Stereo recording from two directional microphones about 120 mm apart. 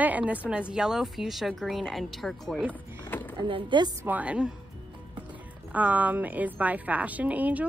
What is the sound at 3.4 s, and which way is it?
Speech, 40° right (ahead or behind).